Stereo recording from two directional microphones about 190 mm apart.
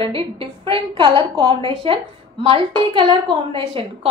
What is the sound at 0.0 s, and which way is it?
A woman's voice, 30° right (ahead or behind).